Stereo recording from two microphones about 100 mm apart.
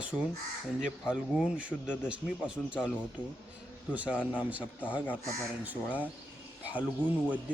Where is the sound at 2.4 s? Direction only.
10° right (ahead or behind).